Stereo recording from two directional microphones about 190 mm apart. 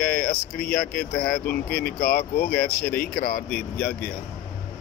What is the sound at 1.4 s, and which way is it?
Speech, 50° left (ahead or behind).